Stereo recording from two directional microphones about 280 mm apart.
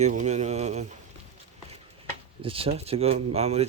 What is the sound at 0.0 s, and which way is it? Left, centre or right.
Speech, right.